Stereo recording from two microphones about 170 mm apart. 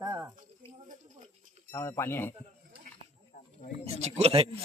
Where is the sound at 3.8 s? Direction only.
40° right (ahead or behind).